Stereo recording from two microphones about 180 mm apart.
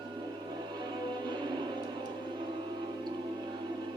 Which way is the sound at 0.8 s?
25° right (ahead or behind).